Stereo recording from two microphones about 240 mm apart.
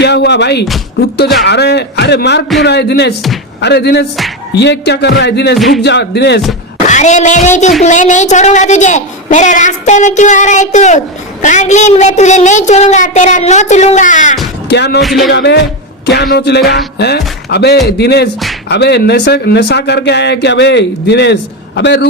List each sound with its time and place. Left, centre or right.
0.0 s speech: left
5.5 s music: centre
5.8 s speech: left
6.8 s a woman's voice: left
14.7 s speech: left
15.0 s music: centre
15.3 s speech: left